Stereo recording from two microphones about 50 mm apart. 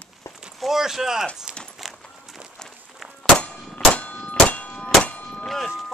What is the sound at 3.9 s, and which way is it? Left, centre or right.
Clang, left.